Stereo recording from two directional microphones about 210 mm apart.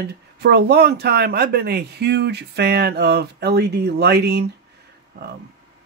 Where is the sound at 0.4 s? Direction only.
50° right (ahead or behind).